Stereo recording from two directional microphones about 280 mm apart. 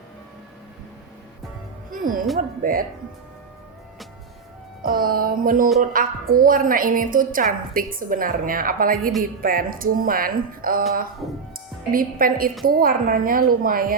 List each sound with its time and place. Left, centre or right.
1.9 s music: right
2.6 s a woman's voice: right
4.8 s a woman's voice: right
11.9 s speech: right